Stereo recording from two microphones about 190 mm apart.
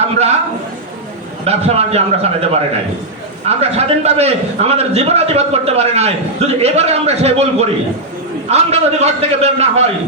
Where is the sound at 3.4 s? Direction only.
35° right (ahead or behind).